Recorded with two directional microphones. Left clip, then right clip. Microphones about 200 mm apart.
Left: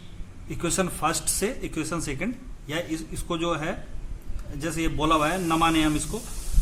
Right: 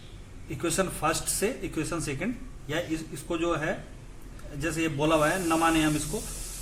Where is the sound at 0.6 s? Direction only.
25° left (ahead or behind).